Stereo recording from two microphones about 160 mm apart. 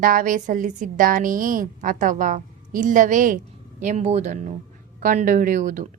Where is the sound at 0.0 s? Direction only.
60° right (ahead or behind).